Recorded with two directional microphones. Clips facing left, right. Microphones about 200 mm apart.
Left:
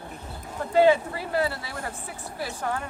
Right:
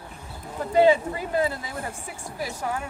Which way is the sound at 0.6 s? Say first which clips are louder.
Right 1 dB; 15° right (ahead or behind).